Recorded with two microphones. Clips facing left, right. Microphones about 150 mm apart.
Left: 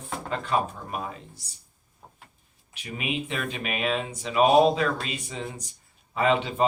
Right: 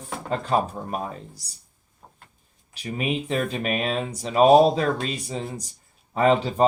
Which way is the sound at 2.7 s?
40° right (ahead or behind).